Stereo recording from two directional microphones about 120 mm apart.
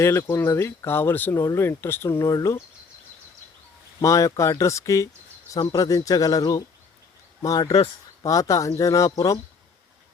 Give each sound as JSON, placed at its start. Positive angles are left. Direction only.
{"t": 0.0, "sound": "speech", "side_deg": 20}
{"t": 4.0, "sound": "speech", "side_deg": 25}